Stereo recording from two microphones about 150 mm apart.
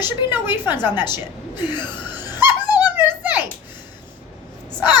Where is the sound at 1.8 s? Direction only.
15° right (ahead or behind).